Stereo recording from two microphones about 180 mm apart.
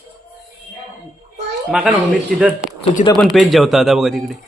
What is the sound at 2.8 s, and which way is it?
Speech, 45° left (ahead or behind).